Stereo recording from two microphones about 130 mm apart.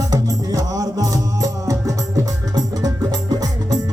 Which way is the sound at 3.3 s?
30° right (ahead or behind).